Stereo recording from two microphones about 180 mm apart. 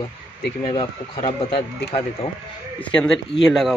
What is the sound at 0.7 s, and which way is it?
Speech, 30° left (ahead or behind).